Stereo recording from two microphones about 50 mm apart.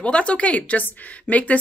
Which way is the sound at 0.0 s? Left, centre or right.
Left.